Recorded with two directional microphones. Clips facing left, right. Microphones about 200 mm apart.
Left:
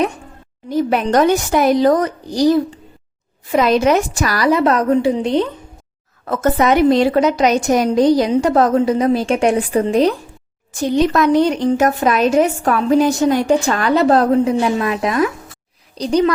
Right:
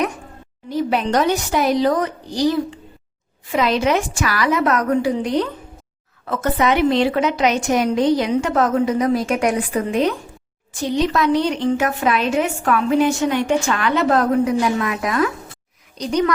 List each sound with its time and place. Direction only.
0.7 s a woman's voice: 50° left (ahead or behind); by 5.5 s 25° left (ahead or behind)
6.2 s a woman's voice: 45° left (ahead or behind)
10.7 s a woman's voice: 45° left (ahead or behind)